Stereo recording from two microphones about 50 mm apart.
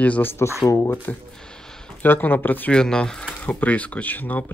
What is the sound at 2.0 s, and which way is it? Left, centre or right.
Speech, left.